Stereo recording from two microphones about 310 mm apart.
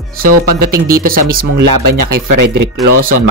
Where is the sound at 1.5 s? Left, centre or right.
Right.